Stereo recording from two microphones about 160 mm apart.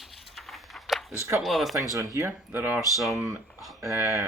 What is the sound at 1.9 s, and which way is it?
Speech, 20° right (ahead or behind).